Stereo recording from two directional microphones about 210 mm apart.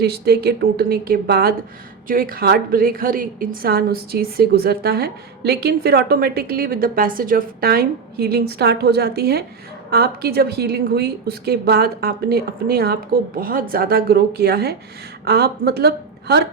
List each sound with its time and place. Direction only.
0.0 s a woman's voice: 50° right (ahead or behind)